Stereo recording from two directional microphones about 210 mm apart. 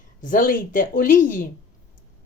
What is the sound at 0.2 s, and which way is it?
A woman's voice, 40° left (ahead or behind).